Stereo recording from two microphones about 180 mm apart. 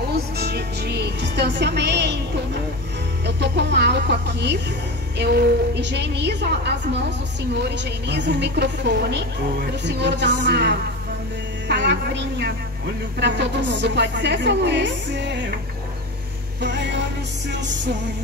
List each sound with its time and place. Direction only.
0.1 s music: 65° right (ahead or behind)
3.3 s a woman's voice: 70° right (ahead or behind)
16.6 s a woman's voice: 75° right (ahead or behind)